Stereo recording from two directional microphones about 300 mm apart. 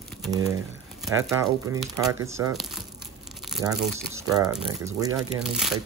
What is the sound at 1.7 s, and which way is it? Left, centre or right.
Speech, centre.